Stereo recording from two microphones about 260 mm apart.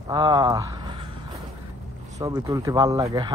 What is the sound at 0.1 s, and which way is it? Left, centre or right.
Speech, centre.